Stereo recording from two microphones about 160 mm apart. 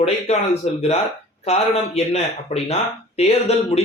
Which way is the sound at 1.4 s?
40° left (ahead or behind).